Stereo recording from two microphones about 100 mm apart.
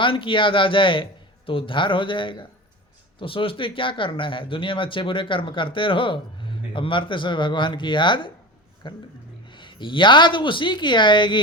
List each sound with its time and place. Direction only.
0.0 s speech: 55° left (ahead or behind)